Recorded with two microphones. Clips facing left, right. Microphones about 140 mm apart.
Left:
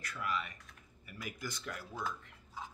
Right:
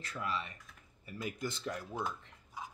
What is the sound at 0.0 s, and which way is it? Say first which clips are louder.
Speech: even; 30° right (ahead or behind).